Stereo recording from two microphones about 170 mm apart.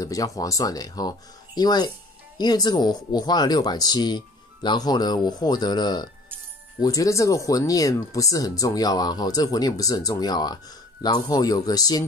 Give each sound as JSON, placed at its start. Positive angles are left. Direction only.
{"t": 0.0, "sound": "speech", "side_deg": 20}